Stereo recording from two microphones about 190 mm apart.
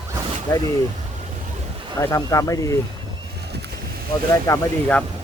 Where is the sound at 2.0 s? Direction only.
15° left (ahead or behind).